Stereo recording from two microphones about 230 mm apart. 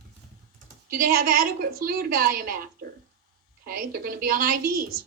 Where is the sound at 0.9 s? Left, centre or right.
Right.